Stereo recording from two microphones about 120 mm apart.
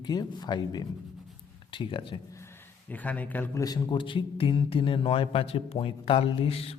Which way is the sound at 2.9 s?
15° left (ahead or behind).